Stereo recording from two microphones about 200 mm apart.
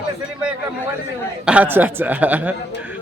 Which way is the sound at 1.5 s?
10° right (ahead or behind).